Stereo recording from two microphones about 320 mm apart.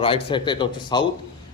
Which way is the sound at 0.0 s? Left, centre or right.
Centre.